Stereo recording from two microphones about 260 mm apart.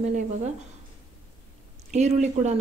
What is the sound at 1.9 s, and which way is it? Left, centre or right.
Speech, right.